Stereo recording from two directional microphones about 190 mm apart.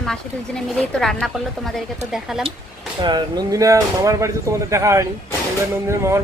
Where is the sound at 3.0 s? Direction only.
20° right (ahead or behind).